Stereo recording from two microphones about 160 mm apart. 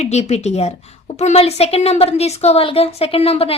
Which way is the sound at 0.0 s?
45° left (ahead or behind).